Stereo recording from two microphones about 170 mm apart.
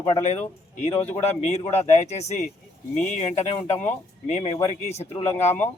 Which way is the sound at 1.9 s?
40° left (ahead or behind).